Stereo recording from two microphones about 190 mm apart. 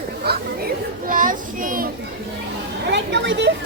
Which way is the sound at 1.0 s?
45° right (ahead or behind).